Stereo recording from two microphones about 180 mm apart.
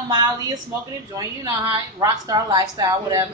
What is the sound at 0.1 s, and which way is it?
A woman's voice, 20° right (ahead or behind).